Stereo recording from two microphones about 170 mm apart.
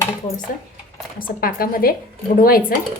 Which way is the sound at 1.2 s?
60° left (ahead or behind).